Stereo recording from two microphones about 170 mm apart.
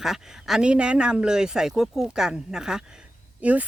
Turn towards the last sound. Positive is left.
turn(degrees=-10)  # may be behind; listen again after turning